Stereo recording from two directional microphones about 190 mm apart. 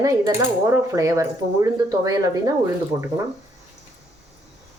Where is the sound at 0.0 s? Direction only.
15° right (ahead or behind).